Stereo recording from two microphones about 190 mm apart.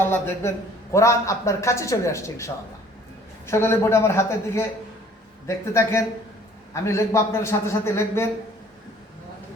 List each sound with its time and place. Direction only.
0.0 s speech: 10° left (ahead or behind)